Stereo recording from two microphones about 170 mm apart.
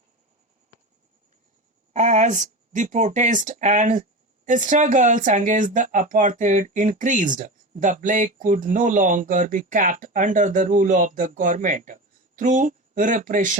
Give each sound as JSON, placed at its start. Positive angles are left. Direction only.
{"t": 1.9, "sound": "speech", "side_deg": -45}